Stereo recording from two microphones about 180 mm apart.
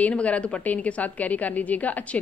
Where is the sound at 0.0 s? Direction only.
5° left (ahead or behind).